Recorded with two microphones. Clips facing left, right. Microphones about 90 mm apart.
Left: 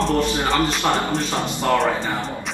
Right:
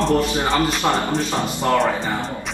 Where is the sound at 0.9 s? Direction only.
10° right (ahead or behind).